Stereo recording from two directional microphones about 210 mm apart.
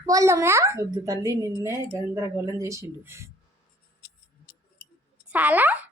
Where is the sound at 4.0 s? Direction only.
50° left (ahead or behind).